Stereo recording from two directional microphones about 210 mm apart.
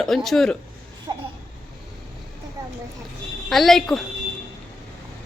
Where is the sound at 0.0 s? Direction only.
Centre (ahead or behind).